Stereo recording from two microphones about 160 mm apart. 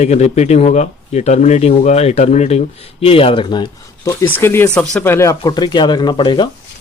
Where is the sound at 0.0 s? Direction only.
45° left (ahead or behind).